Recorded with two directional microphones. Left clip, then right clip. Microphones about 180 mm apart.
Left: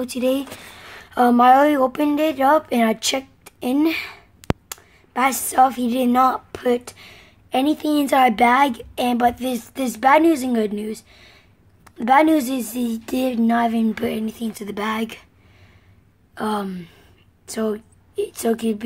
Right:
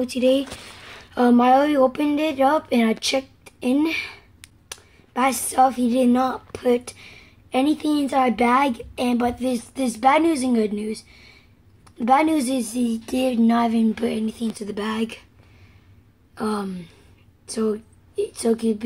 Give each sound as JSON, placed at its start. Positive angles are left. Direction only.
{"t": 0.2, "sound": "a woman's voice", "side_deg": 0}
{"t": 16.3, "sound": "a woman's voice", "side_deg": 20}